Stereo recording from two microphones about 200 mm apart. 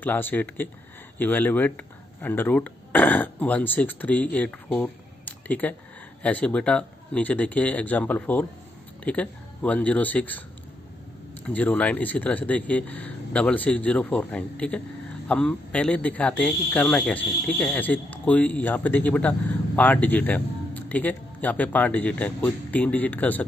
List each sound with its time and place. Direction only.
0.0 s speech: 10° left (ahead or behind)
11.4 s speech: 5° left (ahead or behind)